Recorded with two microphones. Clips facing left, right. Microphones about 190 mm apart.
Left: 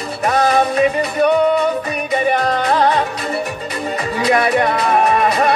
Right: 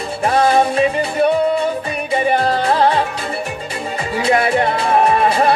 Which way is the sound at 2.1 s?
30° right (ahead or behind).